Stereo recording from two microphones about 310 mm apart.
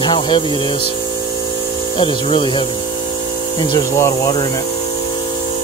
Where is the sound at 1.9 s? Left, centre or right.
Centre.